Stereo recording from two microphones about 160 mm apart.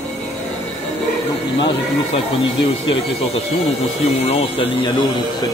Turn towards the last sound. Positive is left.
turn(degrees=35)  # may be behind; listen again after turning